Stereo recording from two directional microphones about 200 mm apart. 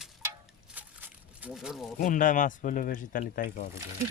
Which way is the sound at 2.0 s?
40° left (ahead or behind).